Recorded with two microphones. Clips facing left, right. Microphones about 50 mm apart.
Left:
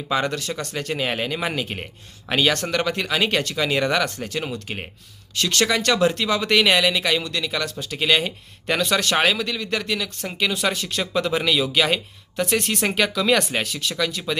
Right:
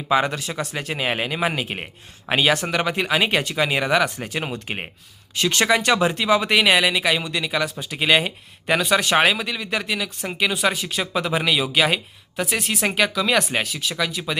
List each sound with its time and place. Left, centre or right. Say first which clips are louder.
0.1 s speech: right 3 dB; centre